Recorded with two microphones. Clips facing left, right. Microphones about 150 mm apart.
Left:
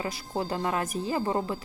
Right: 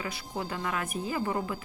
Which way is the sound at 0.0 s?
35° left (ahead or behind).